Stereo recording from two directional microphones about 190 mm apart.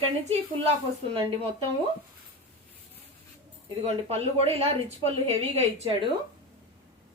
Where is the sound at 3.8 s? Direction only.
30° right (ahead or behind).